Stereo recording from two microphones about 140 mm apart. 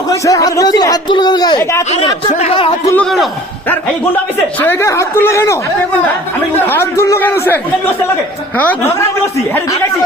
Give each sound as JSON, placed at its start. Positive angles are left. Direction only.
{"t": 0.1, "sound": "speech", "side_deg": 25}
{"t": 2.0, "sound": "speech", "side_deg": 40}
{"t": 2.9, "sound": "a man's voice", "side_deg": 5}
{"t": 4.6, "sound": "a woman's voice", "side_deg": 15}
{"t": 6.7, "sound": "a woman's voice", "side_deg": 20}